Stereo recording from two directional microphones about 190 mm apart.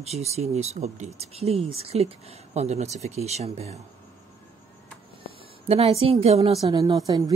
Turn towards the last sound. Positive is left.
turn(degrees=-20)  # may be behind; listen again after turning